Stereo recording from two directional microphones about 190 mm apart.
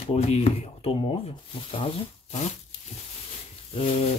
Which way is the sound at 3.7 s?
30° left (ahead or behind).